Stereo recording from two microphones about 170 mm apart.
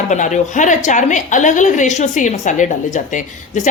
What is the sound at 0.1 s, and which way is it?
A woman's voice, 45° left (ahead or behind).